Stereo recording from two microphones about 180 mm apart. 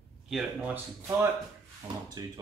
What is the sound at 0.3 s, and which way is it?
Speech, 5° right (ahead or behind).